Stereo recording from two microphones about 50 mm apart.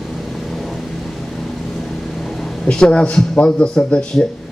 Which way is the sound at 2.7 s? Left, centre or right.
Centre.